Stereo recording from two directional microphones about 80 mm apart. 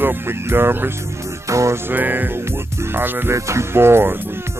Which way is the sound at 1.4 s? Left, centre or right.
Right.